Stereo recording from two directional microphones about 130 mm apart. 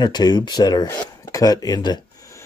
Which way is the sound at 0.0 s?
35° left (ahead or behind).